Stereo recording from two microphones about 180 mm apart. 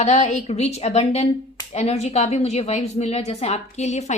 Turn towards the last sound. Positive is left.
turn(degrees=40)  # may be behind; listen again after turning